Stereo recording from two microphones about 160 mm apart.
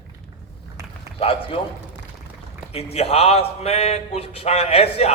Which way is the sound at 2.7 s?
40° left (ahead or behind).